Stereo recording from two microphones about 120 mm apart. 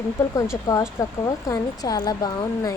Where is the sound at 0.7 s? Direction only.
30° left (ahead or behind).